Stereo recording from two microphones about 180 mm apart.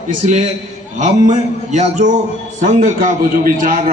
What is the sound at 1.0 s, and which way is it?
A man's voice, 40° right (ahead or behind).